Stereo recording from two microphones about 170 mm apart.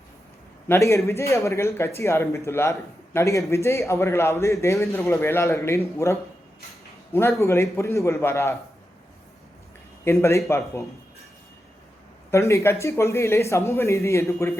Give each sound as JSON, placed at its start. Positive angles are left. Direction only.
{"t": 0.7, "sound": "speech", "side_deg": 15}
{"t": 10.0, "sound": "speech", "side_deg": 15}
{"t": 12.3, "sound": "speech", "side_deg": 15}